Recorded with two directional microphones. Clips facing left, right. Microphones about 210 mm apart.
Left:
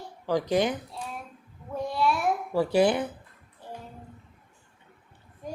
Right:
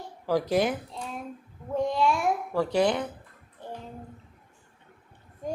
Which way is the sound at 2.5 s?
5° left (ahead or behind).